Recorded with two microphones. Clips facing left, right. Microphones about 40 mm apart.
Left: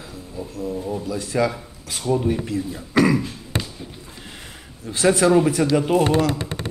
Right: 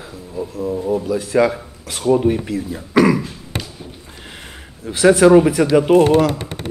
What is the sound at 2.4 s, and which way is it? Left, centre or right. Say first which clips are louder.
Speech: right 2 dB; centre.